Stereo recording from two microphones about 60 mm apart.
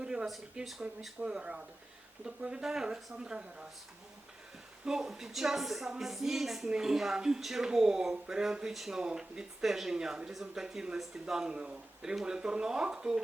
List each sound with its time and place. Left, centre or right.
0.0 s a sound: centre
0.5 s speech: centre
1.2 s speech: centre
4.9 s speech: centre